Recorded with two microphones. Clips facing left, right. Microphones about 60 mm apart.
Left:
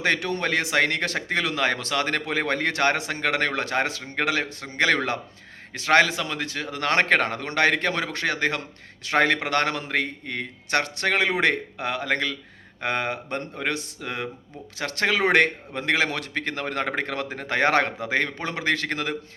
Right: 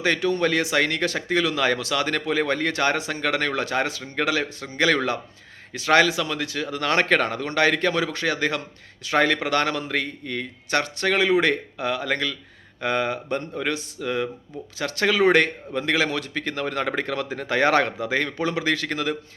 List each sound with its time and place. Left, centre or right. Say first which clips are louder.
0.0 s speech: right 3 dB; left